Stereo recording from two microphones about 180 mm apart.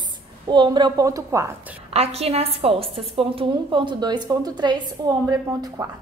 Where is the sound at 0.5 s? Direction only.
25° right (ahead or behind).